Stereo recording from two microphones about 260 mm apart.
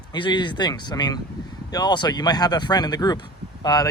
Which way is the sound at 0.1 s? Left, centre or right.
Centre.